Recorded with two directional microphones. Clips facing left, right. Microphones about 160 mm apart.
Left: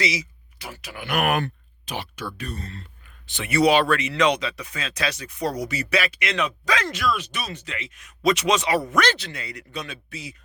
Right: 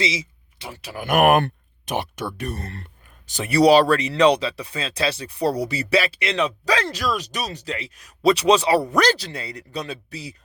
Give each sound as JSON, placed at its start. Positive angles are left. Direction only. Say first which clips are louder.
{"t": 0.0, "sound": "speech", "louder": "right 1 dB", "side_deg": -25}
{"t": 1.0, "sound": "speech", "louder": "right 7 dB", "side_deg": -50}
{"t": 3.2, "sound": "speech", "louder": "right 4 dB", "side_deg": -40}